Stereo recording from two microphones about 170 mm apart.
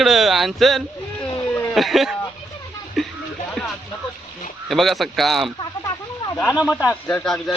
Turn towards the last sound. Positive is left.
turn(degrees=5)  # may be behind; listen again after turning